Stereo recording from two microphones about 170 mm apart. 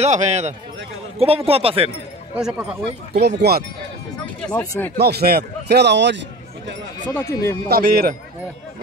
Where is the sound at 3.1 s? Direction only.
70° right (ahead or behind).